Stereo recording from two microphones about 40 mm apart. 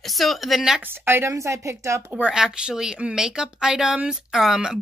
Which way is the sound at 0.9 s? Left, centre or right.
Right.